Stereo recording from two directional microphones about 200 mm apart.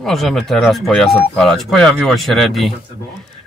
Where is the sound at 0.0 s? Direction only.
Centre (ahead or behind).